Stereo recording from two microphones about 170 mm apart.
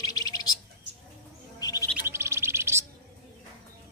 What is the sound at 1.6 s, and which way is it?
Chirp, 20° left (ahead or behind).